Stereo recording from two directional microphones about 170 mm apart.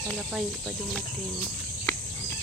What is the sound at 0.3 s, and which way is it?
Speech, 5° right (ahead or behind).